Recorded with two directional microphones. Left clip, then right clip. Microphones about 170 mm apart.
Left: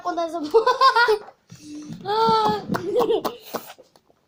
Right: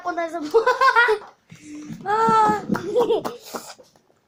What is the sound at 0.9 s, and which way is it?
Speech, 45° left (ahead or behind).